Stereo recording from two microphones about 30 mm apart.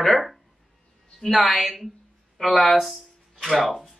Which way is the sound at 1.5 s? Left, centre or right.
Centre.